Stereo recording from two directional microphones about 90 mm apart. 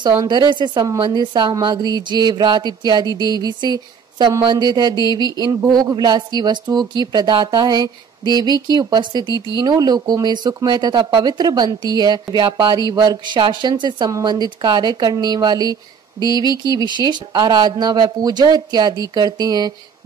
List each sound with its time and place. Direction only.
0.3 s a woman's voice: 60° right (ahead or behind)